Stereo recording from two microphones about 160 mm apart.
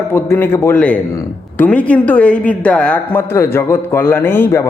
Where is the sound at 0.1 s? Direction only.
15° left (ahead or behind).